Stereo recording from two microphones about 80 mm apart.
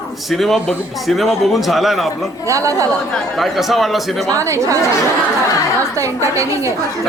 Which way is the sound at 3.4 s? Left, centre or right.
Centre.